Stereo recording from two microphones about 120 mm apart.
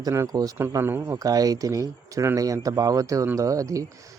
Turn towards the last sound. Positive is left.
turn(degrees=-25)  # may be behind; listen again after turning